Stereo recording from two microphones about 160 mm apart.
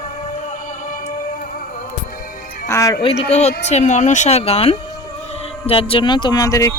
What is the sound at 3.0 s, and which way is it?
Speech, 40° left (ahead or behind).